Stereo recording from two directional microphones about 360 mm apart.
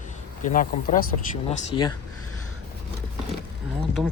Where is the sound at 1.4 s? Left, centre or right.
Centre.